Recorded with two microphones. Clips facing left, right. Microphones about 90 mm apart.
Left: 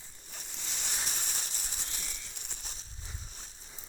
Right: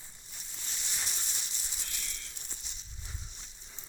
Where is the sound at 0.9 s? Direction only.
45° left (ahead or behind).